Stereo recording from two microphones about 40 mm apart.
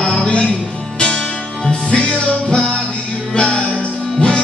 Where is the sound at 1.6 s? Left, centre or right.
Left.